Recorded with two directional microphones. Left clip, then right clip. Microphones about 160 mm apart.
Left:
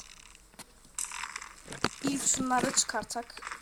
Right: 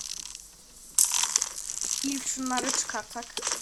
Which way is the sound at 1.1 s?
40° right (ahead or behind).